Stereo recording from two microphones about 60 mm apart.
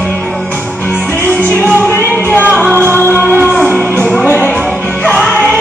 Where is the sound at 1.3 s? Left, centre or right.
Right.